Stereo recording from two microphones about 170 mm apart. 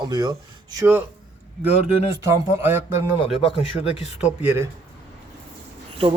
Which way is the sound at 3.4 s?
35° left (ahead or behind).